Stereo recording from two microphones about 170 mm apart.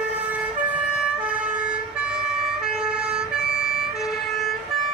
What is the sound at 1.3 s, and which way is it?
Emergency vehicle, 5° right (ahead or behind).